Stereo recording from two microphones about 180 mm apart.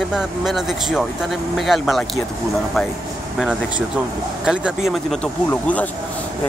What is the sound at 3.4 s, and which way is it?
Speech, 5° right (ahead or behind).